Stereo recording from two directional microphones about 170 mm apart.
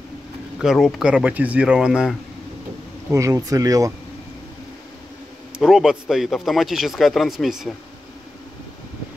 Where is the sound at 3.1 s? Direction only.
20° right (ahead or behind).